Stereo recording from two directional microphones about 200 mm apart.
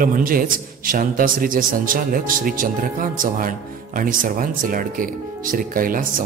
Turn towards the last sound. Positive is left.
turn(degrees=-45)  # may be behind; listen again after turning